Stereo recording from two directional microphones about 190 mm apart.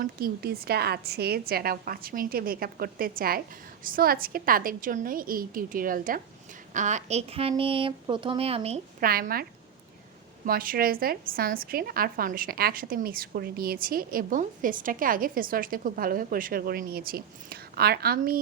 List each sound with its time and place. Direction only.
0.0 s a woman's voice: 50° right (ahead or behind); by 8.8 s 30° right (ahead or behind)
9.0 s a woman's voice: 50° right (ahead or behind)